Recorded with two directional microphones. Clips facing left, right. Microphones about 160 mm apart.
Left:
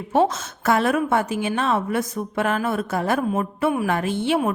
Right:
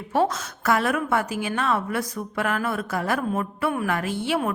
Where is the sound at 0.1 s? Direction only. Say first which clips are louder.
Left 3 dB; 25° left (ahead or behind).